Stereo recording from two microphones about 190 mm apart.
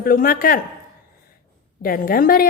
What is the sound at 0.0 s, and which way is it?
Speech, 50° left (ahead or behind).